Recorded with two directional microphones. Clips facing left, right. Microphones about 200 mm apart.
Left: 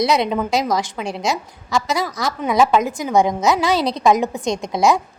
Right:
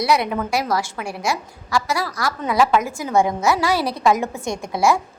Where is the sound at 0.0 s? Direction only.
20° left (ahead or behind).